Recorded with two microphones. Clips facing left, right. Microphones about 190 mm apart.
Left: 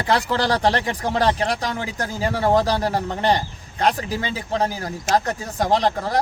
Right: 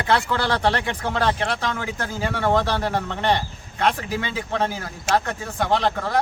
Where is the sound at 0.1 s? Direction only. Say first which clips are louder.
Left 2 dB; 35° left (ahead or behind).